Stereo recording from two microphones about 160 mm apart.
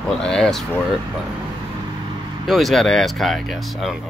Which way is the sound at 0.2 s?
5° left (ahead or behind).